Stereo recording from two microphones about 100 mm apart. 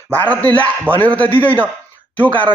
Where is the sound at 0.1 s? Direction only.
15° left (ahead or behind).